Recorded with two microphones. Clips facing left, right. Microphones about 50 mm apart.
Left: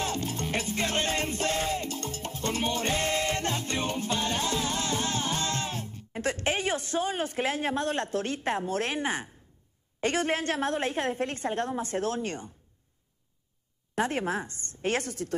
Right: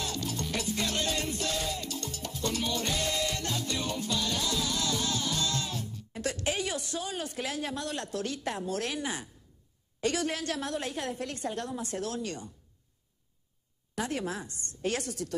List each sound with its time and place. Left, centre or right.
0.0 s music: left
9.9 s a woman's voice: left
13.9 s a woman's voice: left